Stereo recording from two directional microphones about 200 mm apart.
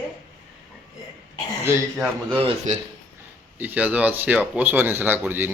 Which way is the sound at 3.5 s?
10° right (ahead or behind).